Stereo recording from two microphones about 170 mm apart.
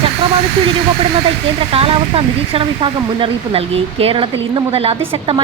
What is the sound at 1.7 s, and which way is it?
Speech, 35° right (ahead or behind).